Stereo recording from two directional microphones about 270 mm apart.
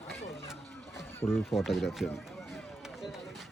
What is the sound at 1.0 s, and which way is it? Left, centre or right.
Speech, centre.